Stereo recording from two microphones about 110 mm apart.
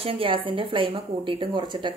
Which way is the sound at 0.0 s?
55° right (ahead or behind).